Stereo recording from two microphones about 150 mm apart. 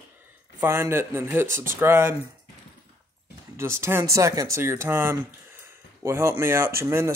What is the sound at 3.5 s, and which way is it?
Speech, 15° right (ahead or behind).